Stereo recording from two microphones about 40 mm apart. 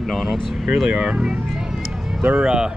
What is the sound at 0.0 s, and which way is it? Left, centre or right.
Speech, centre.